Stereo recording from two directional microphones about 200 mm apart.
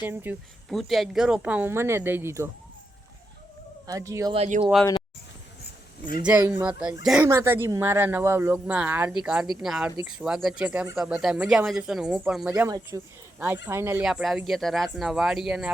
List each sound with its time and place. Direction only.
0.0 s speech: 10° right (ahead or behind)
0.7 s speech: centre (ahead or behind)
3.8 s speech: 15° right (ahead or behind)
4.4 s speech: 40° right (ahead or behind)
6.2 s speech: 10° right (ahead or behind)